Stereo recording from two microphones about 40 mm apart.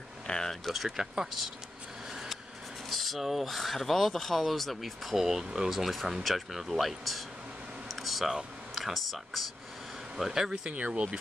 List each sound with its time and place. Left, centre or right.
0.3 s speech: centre
0.7 s speech: centre
2.0 s a sound: centre
2.9 s speech: centre
5.1 s speech: centre
7.9 s a sound: centre
8.7 s speech: centre
10.1 s speech: centre
10.7 s speech: right